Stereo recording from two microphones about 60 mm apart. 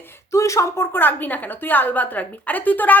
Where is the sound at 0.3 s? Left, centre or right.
Left.